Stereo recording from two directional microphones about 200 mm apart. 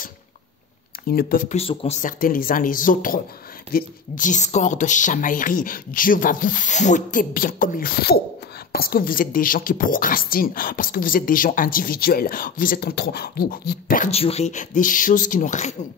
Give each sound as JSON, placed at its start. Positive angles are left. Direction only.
{"t": 1.0, "sound": "speech", "side_deg": 45}
{"t": 2.0, "sound": "a woman's voice", "side_deg": 40}